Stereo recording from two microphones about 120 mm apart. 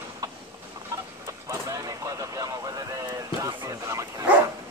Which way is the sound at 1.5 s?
30° right (ahead or behind).